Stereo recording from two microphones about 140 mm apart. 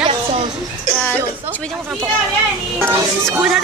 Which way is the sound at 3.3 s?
5° right (ahead or behind).